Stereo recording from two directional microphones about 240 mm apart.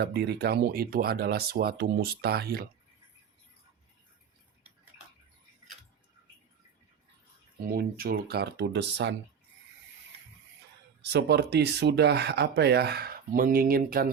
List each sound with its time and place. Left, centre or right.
0.0 s speech: right
7.6 s speech: right
11.0 s speech: right